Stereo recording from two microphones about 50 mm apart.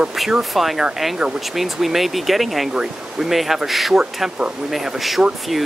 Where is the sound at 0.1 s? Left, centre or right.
Centre.